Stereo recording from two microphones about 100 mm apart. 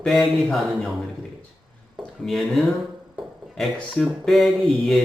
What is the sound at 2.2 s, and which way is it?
Speech, centre (ahead or behind).